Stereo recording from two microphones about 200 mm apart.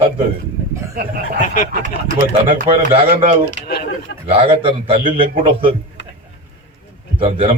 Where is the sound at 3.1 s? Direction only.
35° right (ahead or behind).